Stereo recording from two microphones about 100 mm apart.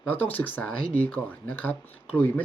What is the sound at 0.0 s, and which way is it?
Speech, 15° left (ahead or behind).